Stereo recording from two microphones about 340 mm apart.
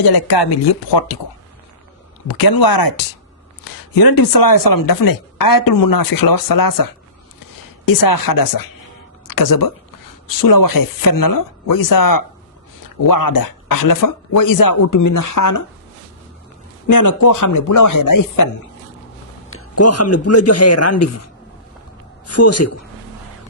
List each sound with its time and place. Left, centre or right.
0.0 s speech: left
2.2 s speech: left
7.9 s speech: left
16.8 s speech: left
19.5 s a man's voice: left
22.3 s a man's voice: left